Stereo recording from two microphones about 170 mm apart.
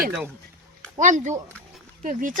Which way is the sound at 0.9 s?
45° right (ahead or behind).